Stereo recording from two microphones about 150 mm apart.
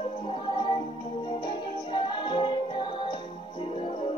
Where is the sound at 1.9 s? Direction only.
30° left (ahead or behind).